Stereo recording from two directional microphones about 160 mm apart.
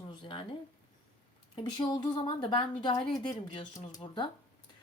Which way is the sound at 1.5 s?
30° left (ahead or behind).